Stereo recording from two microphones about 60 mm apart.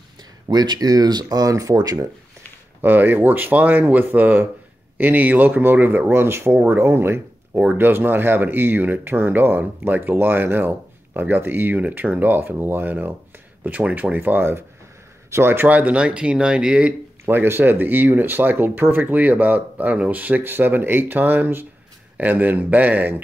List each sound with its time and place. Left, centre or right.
0.6 s speech: right
2.8 s speech: right
15.7 s speech: right
17.3 s a man's voice: right